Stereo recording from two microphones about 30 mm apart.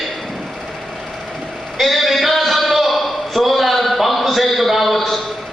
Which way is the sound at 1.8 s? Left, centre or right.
Centre.